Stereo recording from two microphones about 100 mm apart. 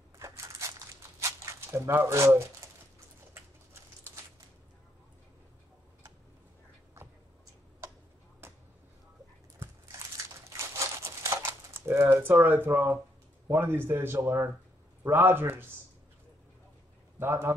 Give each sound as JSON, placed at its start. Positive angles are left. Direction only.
{"t": 0.2, "sound": "crushing", "side_deg": -30}
{"t": 1.4, "sound": "speech", "side_deg": -30}
{"t": 8.4, "sound": "a sound", "side_deg": -25}
{"t": 10.8, "sound": "crumpling", "side_deg": -30}
{"t": 12.4, "sound": "speech", "side_deg": -20}
{"t": 17.2, "sound": "speech", "side_deg": -25}